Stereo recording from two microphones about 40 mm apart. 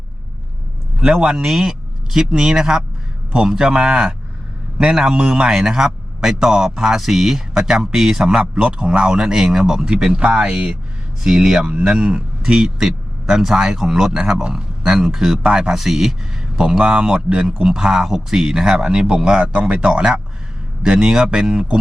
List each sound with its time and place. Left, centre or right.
0.9 s speech: centre
1.4 s speech: centre
11.6 s speech: right
15.7 s speech: centre